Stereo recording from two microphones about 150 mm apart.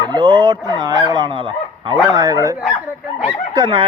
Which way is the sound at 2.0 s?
25° right (ahead or behind).